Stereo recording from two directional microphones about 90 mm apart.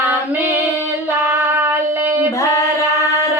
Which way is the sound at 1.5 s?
25° right (ahead or behind).